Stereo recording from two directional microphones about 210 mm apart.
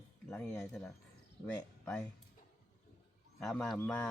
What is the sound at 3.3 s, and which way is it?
Speech, centre (ahead or behind).